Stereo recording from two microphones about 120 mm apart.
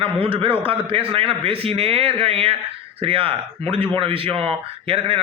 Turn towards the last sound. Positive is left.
turn(degrees=-50)  # may be behind; listen again after turning